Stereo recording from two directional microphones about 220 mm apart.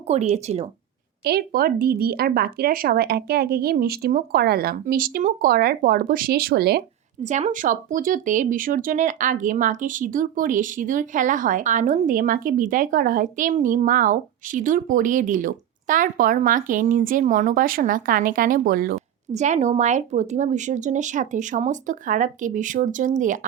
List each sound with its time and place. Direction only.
0.1 s speech: 30° right (ahead or behind)
1.2 s speech: 45° right (ahead or behind)
7.3 s speech: 30° right (ahead or behind)